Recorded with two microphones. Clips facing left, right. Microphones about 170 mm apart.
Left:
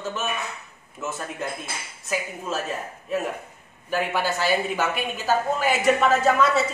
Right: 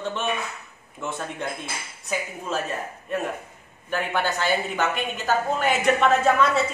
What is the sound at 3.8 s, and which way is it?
Speech, 5° left (ahead or behind).